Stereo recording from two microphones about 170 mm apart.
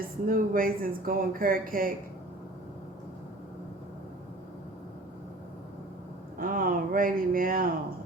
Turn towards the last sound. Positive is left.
turn(degrees=-55)  # may be behind; listen again after turning